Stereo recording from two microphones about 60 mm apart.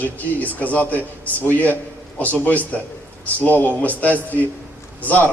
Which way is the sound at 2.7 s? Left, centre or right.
Left.